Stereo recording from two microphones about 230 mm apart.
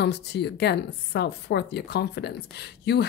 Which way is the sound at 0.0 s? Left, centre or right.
Left.